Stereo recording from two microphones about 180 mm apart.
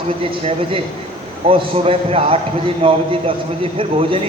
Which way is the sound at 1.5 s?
30° right (ahead or behind).